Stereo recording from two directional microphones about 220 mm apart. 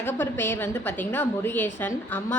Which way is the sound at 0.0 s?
10° left (ahead or behind).